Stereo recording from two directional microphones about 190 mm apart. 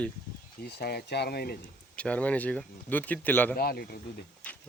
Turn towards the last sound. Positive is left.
turn(degrees=55)  # may be behind; listen again after turning